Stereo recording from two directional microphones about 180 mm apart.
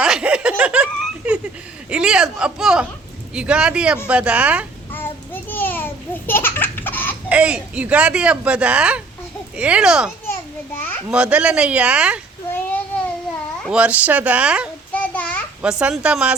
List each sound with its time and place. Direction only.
0.0 s snicker: 5° right (ahead or behind)
1.9 s a sound: 5° right (ahead or behind)
3.3 s speech: 5° right (ahead or behind)
4.9 s babbling: 10° left (ahead or behind)
7.3 s speech: 5° right (ahead or behind)
10.8 s children playing: 10° left (ahead or behind)
11.1 s speech: 5° right (ahead or behind)
12.5 s a sound: 10° left (ahead or behind)
13.6 s speech: 5° right (ahead or behind)
14.9 s a sound: 10° left (ahead or behind)
15.8 s speech: 5° right (ahead or behind)